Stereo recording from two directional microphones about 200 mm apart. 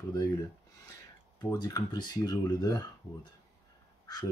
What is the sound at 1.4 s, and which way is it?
Speech, 20° left (ahead or behind).